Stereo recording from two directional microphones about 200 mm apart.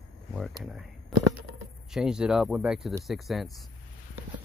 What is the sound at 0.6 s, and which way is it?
Speech, centre (ahead or behind).